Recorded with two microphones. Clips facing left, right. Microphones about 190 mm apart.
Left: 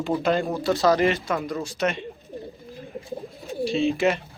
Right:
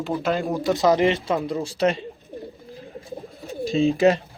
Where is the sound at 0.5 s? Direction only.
15° right (ahead or behind); by 2.1 s 35° right (ahead or behind).